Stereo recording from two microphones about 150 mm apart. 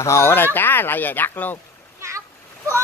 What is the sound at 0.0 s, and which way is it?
Speech, 20° left (ahead or behind).